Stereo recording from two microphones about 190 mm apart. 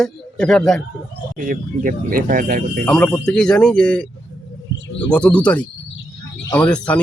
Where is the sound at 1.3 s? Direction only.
45° right (ahead or behind).